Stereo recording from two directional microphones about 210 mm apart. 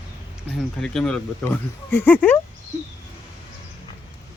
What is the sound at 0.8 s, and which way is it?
Speech, 5° left (ahead or behind).